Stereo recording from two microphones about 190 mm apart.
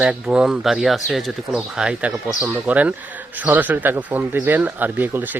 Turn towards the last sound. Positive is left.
turn(degrees=-10)  # may be behind; listen again after turning